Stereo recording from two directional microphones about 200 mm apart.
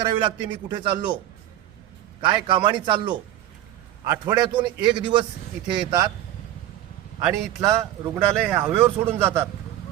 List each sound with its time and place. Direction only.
0.0 s a man's voice: 25° right (ahead or behind)
2.2 s a man's voice: 25° right (ahead or behind)
7.6 s speech: 15° right (ahead or behind)